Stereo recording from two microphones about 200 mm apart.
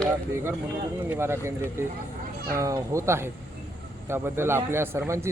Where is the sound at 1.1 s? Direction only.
10° right (ahead or behind).